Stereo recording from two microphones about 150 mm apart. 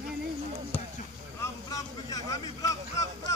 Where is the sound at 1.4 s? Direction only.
20° left (ahead or behind).